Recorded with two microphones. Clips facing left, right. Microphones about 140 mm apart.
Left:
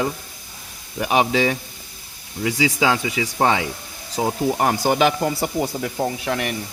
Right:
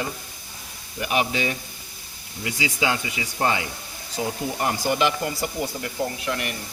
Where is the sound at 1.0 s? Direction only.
90° left.